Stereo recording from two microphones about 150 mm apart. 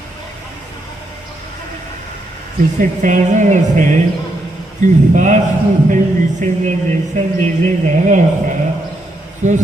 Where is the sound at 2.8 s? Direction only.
55° right (ahead or behind).